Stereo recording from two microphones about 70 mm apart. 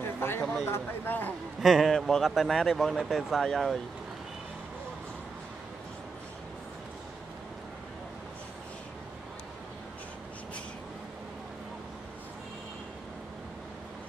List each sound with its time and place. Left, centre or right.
0.0 s a sound: left
0.7 s speech: left
1.6 s speech: centre